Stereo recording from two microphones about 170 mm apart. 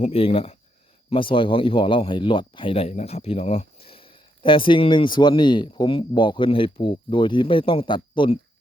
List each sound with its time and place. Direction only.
0.0 s speech: 35° left (ahead or behind)